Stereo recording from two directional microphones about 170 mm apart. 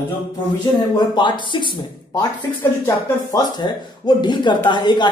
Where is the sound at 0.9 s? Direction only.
25° left (ahead or behind).